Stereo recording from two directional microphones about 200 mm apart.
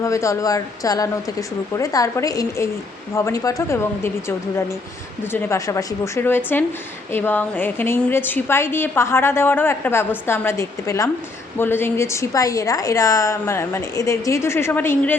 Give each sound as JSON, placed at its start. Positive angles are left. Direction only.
{"t": 0.0, "sound": "a woman's voice", "side_deg": 15}